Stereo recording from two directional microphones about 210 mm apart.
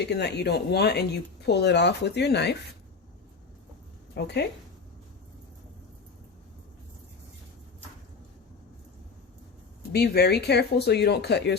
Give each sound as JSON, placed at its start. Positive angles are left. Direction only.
{"t": 0.0, "sound": "speech", "side_deg": 55}
{"t": 4.1, "sound": "speech", "side_deg": 50}
{"t": 9.9, "sound": "speech", "side_deg": 50}